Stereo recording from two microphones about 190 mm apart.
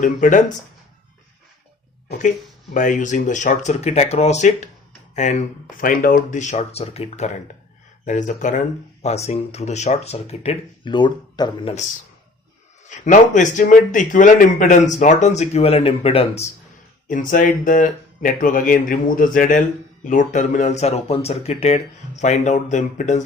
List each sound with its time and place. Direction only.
0.0 s speech: 40° left (ahead or behind)
2.7 s speech: 40° left (ahead or behind); by 11.7 s 25° left (ahead or behind)
12.9 s speech: 40° left (ahead or behind)
17.1 s speech: 45° left (ahead or behind)